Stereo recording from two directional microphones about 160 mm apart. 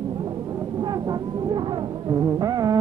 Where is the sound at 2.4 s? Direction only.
25° right (ahead or behind).